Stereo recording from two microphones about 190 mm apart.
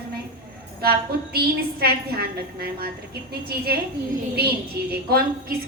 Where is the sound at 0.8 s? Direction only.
55° right (ahead or behind).